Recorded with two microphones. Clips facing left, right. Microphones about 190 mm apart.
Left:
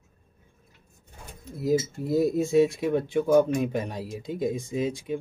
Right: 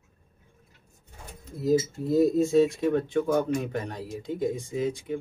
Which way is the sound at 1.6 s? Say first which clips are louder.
Right 1 dB; 5° left (ahead or behind).